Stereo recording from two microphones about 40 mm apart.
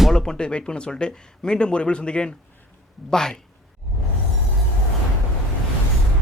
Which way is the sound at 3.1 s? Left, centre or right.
Centre.